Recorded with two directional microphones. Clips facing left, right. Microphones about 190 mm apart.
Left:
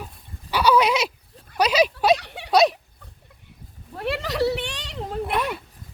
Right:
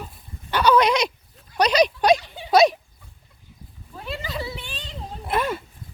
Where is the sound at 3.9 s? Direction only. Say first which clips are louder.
Left 6 dB; 75° left (ahead or behind).